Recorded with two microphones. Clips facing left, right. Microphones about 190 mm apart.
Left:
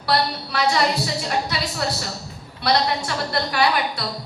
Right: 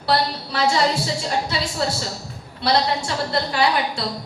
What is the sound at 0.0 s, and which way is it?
A woman's voice, 25° right (ahead or behind).